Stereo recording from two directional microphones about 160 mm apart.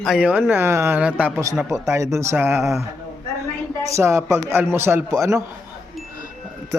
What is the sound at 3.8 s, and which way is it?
A man's voice, 20° right (ahead or behind).